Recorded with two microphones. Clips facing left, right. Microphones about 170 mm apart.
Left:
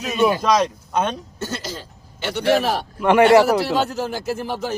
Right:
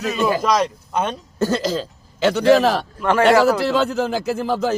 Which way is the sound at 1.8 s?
90° right.